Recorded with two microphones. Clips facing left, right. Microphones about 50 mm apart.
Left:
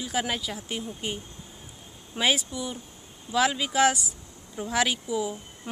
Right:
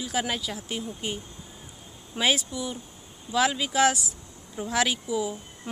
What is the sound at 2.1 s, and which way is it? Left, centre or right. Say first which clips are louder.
A woman's voice: even; centre.